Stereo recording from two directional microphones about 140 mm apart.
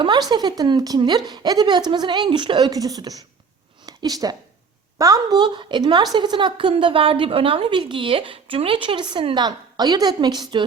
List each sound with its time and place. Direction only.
0.0 s a woman's voice: 30° right (ahead or behind)